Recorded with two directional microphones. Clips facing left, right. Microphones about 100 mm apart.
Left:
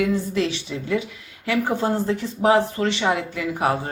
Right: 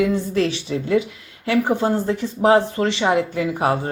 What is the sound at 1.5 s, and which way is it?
Speech, 20° right (ahead or behind).